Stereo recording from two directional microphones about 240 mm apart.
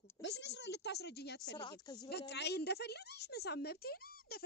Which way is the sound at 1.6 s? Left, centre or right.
Centre.